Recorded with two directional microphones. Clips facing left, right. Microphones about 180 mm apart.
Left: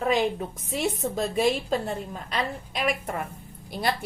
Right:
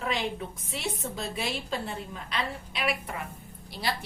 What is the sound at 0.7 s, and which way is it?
A woman's voice, 45° left (ahead or behind).